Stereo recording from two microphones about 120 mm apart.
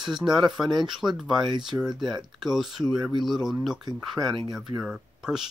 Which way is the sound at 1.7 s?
15° right (ahead or behind).